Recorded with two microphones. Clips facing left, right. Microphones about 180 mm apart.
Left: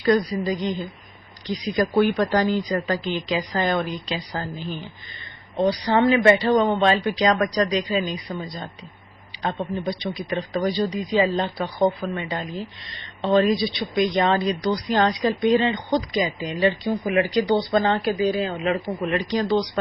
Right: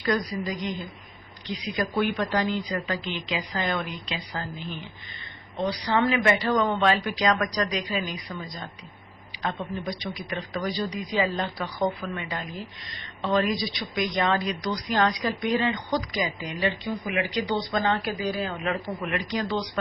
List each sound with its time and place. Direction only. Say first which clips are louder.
0.0 s speech: left 6 dB; 30° left (ahead or behind)